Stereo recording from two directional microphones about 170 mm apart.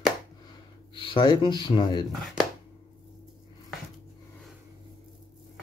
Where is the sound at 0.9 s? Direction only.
30° left (ahead or behind).